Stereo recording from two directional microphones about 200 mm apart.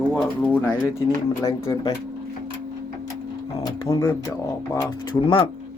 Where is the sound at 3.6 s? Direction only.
15° left (ahead or behind).